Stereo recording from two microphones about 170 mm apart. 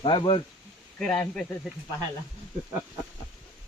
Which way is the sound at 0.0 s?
30° left (ahead or behind).